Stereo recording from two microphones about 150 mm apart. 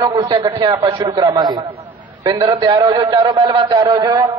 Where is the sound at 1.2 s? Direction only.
20° right (ahead or behind); by 4.0 s 40° right (ahead or behind).